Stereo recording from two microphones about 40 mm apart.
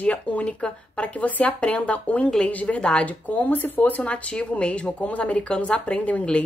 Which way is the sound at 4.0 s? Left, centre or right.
Left.